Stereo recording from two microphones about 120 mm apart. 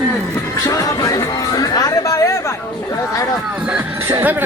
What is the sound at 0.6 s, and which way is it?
Music, 30° left (ahead or behind).